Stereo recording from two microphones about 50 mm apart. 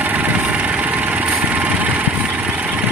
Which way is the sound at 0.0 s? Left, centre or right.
Right.